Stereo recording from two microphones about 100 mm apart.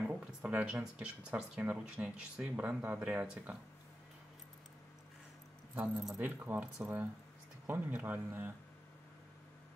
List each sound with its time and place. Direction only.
0.0 s speech: 10° right (ahead or behind)
5.9 s speech: 5° right (ahead or behind)
6.2 s speech: 20° right (ahead or behind)